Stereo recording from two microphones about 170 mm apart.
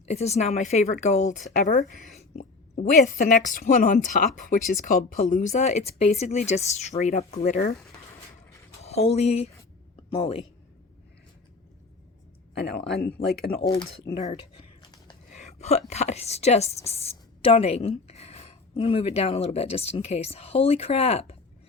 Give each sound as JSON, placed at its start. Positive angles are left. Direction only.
{"t": 0.0, "sound": "speech", "side_deg": 40}
{"t": 8.8, "sound": "a woman's voice", "side_deg": 40}
{"t": 13.0, "sound": "speech", "side_deg": 65}
{"t": 13.6, "sound": "a woman's voice", "side_deg": 30}
{"t": 15.3, "sound": "a sound", "side_deg": 40}
{"t": 15.9, "sound": "a woman's voice", "side_deg": 40}